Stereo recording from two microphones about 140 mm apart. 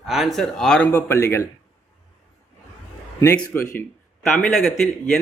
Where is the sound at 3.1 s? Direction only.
20° left (ahead or behind).